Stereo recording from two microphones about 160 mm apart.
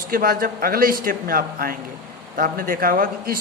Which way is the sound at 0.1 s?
65° right (ahead or behind).